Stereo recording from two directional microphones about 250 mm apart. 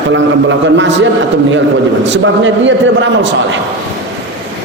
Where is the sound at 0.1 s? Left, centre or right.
Right.